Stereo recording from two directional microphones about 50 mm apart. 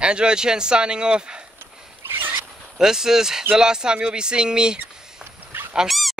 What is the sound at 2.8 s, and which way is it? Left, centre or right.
Speech, centre.